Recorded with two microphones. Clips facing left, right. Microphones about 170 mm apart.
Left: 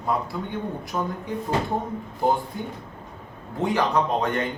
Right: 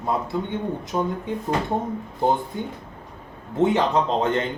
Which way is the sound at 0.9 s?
20° right (ahead or behind).